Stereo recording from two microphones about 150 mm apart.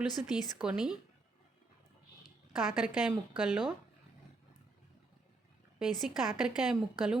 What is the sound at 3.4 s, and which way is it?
Speech, 5° right (ahead or behind).